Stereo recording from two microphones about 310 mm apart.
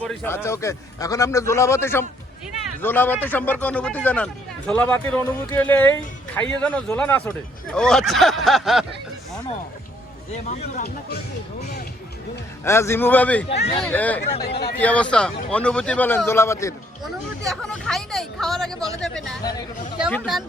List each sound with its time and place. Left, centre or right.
0.0 s a man's voice: centre
10.3 s speech: left
12.6 s a man's voice: centre
14.2 s speech: left
14.8 s speech: centre